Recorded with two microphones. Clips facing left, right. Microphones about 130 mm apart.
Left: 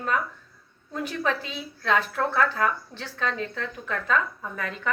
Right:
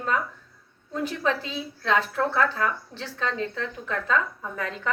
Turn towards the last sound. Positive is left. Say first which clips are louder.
# right 1 dB
turn(degrees=-25)  # may be behind; listen again after turning